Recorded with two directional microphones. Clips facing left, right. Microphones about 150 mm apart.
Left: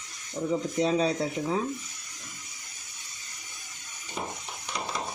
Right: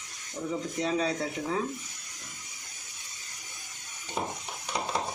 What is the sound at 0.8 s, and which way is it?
Speech, 20° left (ahead or behind).